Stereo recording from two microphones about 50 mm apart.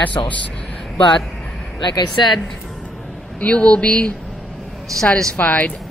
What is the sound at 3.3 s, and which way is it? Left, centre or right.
Speech, left.